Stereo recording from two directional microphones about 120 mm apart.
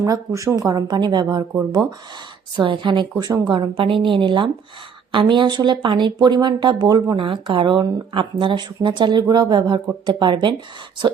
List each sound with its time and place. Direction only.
0.0 s speech: 25° right (ahead or behind)
2.6 s a woman's voice: 45° right (ahead or behind)
7.2 s speech: 45° right (ahead or behind)